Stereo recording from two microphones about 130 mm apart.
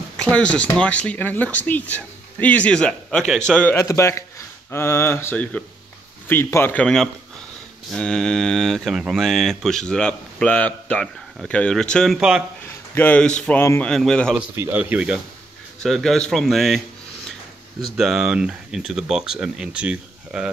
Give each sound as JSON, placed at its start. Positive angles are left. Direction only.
{"t": 0.2, "sound": "speech", "side_deg": 10}
{"t": 3.7, "sound": "speech", "side_deg": 20}
{"t": 12.6, "sound": "speech", "side_deg": 15}
{"t": 13.8, "sound": "speech", "side_deg": 5}
{"t": 14.5, "sound": "speech", "side_deg": -15}
{"t": 15.8, "sound": "speech", "side_deg": 5}
{"t": 17.9, "sound": "speech", "side_deg": -5}